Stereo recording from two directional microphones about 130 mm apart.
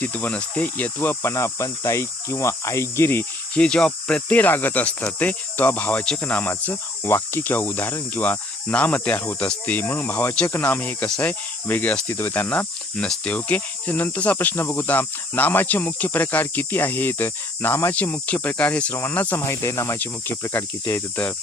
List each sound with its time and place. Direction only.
0.0 s cricket: 10° left (ahead or behind)